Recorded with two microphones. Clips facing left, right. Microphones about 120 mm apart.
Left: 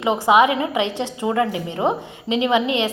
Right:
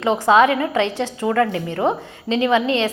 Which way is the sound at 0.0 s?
15° left (ahead or behind).